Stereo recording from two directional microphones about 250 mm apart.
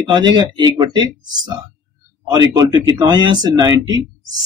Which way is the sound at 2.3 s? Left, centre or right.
Centre.